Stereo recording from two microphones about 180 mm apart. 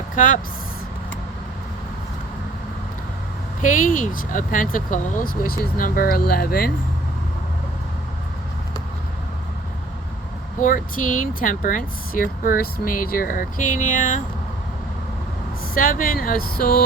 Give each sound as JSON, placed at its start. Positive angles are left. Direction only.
{"t": 0.2, "sound": "speech", "side_deg": 45}
{"t": 3.6, "sound": "speech", "side_deg": 45}
{"t": 10.6, "sound": "speech", "side_deg": 50}
{"t": 15.7, "sound": "speech", "side_deg": 50}